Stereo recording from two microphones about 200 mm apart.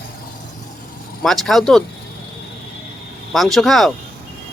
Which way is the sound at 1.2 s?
Centre (ahead or behind).